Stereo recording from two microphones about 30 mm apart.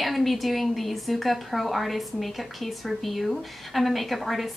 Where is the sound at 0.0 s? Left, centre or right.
Centre.